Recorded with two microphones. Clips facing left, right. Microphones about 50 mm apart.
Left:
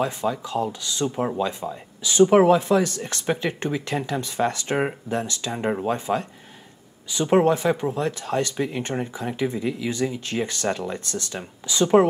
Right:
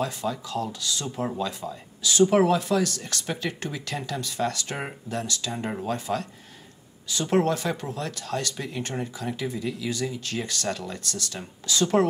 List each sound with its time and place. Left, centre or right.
0.0 s speech: left